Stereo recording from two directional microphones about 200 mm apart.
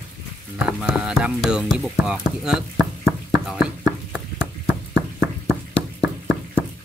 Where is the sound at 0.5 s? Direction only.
5° right (ahead or behind).